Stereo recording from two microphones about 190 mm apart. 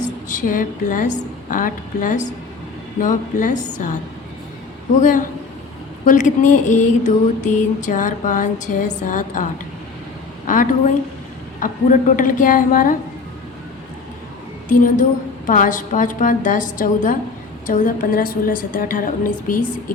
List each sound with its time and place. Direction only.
0.0 s a woman's voice: 45° left (ahead or behind)
3.7 s a sound: 40° left (ahead or behind)
4.9 s a woman's voice: 40° left (ahead or behind)
6.1 s a sound: 40° left (ahead or behind)
10.4 s a woman's voice: 40° left (ahead or behind)
14.7 s a woman's voice: 45° left (ahead or behind)